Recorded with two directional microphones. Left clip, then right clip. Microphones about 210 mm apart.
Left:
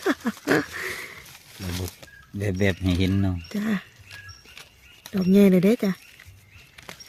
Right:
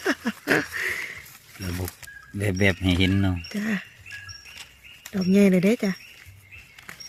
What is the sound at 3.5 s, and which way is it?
Speech, 40° left (ahead or behind).